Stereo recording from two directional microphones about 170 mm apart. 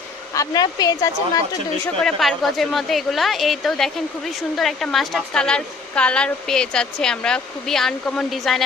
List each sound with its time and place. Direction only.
0.3 s speech: 20° left (ahead or behind)
2.0 s speech: centre (ahead or behind)